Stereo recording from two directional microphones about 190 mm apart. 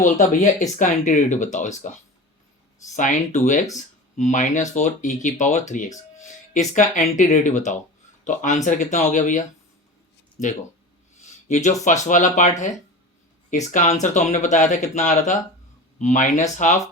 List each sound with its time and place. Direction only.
0.8 s speech: 40° left (ahead or behind)
2.9 s speech: 40° left (ahead or behind)
11.4 s speech: 40° left (ahead or behind)